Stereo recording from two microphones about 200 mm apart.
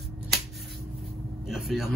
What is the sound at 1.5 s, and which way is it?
Vehicle, centre (ahead or behind).